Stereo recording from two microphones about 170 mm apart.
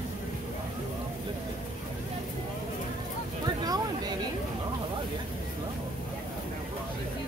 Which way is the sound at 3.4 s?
25° right (ahead or behind).